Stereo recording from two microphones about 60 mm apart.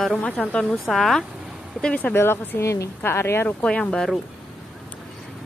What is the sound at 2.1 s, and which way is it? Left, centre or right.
Speech, left.